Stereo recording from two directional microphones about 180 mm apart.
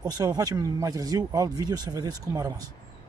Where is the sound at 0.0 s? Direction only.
20° right (ahead or behind).